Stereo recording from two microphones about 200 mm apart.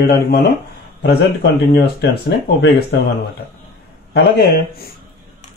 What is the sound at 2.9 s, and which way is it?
Speech, 55° left (ahead or behind).